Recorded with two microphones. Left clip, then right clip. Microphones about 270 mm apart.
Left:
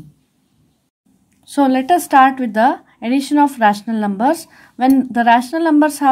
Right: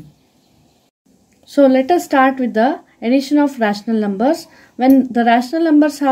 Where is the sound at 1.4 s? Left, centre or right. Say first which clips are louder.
Right 2 dB; centre.